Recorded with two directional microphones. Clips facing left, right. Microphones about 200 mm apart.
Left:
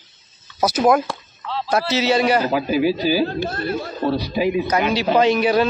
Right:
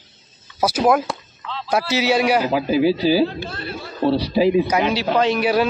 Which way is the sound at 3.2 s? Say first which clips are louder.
Left 4 dB; 50° left (ahead or behind).